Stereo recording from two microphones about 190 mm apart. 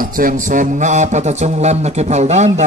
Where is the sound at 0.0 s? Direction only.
45° right (ahead or behind).